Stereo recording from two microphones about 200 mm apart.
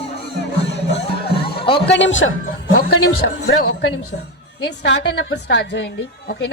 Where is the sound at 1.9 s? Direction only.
65° left (ahead or behind).